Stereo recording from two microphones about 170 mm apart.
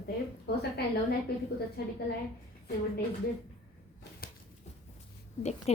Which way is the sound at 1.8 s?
70° left (ahead or behind).